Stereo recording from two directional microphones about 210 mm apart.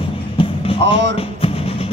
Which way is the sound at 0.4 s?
25° left (ahead or behind).